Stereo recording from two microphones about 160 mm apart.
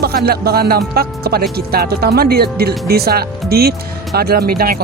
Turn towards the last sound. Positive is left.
turn(degrees=-70)  # may be behind; listen again after turning